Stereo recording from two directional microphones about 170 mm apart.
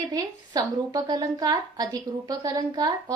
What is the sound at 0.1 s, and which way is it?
A woman's voice, 25° right (ahead or behind).